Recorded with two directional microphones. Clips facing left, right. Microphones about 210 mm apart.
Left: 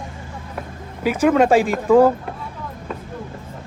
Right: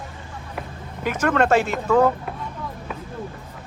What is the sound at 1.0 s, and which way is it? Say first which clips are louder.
Speech: left 5 dB; 10° left (ahead or behind).